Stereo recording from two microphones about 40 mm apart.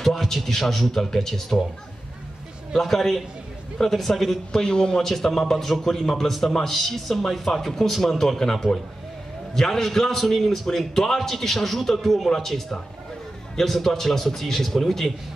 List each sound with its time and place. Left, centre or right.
0.0 s speech: centre
2.8 s a man's voice: centre
4.0 s a man's voice: centre
4.6 s a man's voice: left
5.0 s a man's voice: centre